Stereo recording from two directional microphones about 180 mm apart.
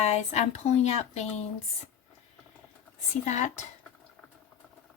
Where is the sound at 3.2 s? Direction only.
40° left (ahead or behind).